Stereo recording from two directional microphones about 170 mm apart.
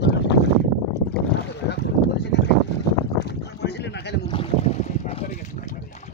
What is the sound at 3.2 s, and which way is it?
Boat, 80° left.